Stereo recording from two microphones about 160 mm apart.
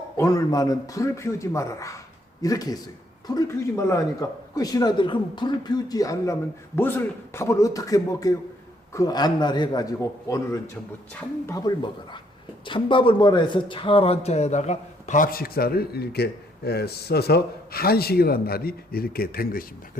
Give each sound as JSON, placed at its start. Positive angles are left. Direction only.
{"t": 0.2, "sound": "speech", "side_deg": 20}